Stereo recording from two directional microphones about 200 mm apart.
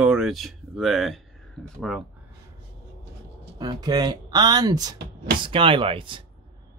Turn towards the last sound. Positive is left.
turn(degrees=-25)  # may be behind; listen again after turning